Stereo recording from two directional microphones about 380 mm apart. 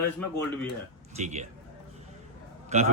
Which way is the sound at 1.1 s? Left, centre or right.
Centre.